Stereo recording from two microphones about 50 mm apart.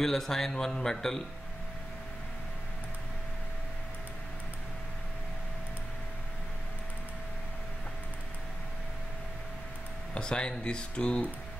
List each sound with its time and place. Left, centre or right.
0.0 s speech: centre
10.1 s speech: centre